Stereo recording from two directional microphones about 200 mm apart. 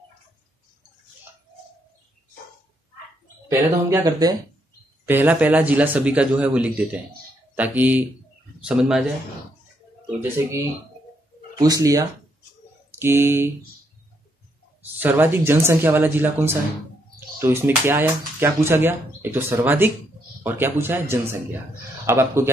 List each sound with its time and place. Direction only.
3.4 s speech: 15° right (ahead or behind)
10.2 s speech: 10° right (ahead or behind)
15.0 s speech: 10° right (ahead or behind)